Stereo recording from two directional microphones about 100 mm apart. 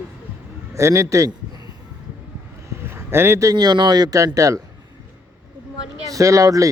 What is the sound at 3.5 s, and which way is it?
Speech, 45° right (ahead or behind).